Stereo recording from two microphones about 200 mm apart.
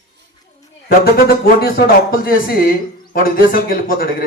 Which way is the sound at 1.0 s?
50° left (ahead or behind).